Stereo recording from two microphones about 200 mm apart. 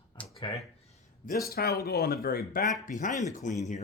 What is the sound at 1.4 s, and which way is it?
Speech, 50° left (ahead or behind).